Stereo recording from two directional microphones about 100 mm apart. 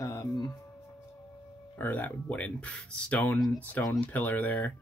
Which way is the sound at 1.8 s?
15° left (ahead or behind).